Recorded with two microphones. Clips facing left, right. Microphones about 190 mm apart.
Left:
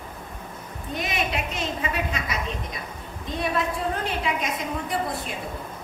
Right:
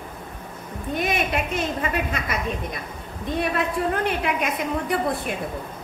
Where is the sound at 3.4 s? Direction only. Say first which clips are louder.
Right 2 dB; 60° right (ahead or behind).